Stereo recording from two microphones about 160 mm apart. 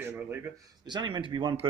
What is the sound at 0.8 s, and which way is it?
Speech, 30° right (ahead or behind).